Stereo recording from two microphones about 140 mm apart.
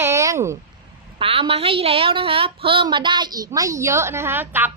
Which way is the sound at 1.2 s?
40° right (ahead or behind).